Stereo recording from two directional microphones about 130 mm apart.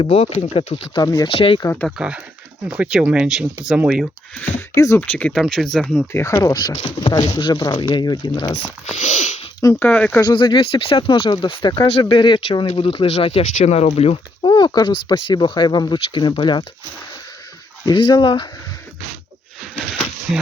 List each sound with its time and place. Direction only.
0.0 s speech: 45° left (ahead or behind)
0.9 s speech: 30° left (ahead or behind)
1.3 s speech: 45° left (ahead or behind)
1.6 s speech: 15° left (ahead or behind)
2.0 s speech: 10° right (ahead or behind)
4.5 s a sound: 25° left (ahead or behind)
4.9 s speech: 10° left (ahead or behind)
6.1 s speech: 20° left (ahead or behind)
8.9 s a sound: 65° left (ahead or behind)
9.8 s speech: 15° left (ahead or behind)
10.2 s speech: 35° left (ahead or behind)
13.6 s speech: 55° left (ahead or behind)
14.4 s speech: 35° left (ahead or behind)
17.8 s speech: 35° left (ahead or behind)